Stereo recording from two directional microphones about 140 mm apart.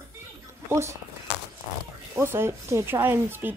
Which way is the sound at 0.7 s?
20° right (ahead or behind).